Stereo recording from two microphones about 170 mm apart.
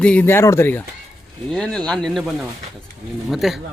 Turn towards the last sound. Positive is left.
turn(degrees=0)  # may be behind; listen again after turning